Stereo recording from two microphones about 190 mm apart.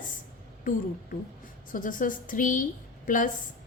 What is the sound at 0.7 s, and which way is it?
A woman's voice, 45° left (ahead or behind).